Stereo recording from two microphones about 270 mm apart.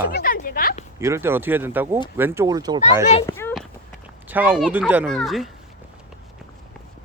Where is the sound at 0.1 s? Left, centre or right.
Left.